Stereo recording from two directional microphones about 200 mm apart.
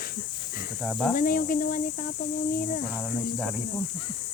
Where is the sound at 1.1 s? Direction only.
45° left (ahead or behind).